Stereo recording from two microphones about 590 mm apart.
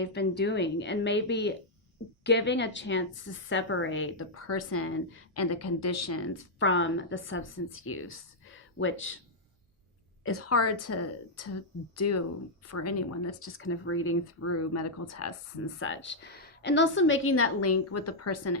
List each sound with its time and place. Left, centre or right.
0.0 s a woman's voice: centre
10.2 s a woman's voice: left